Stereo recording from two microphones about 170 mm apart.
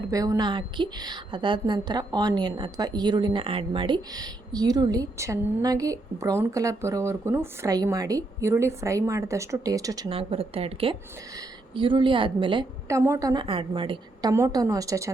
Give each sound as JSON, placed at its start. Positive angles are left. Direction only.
{"t": 0.1, "sound": "a woman's voice", "side_deg": -20}
{"t": 10.1, "sound": "a woman's voice", "side_deg": -35}
{"t": 12.9, "sound": "a woman's voice", "side_deg": -15}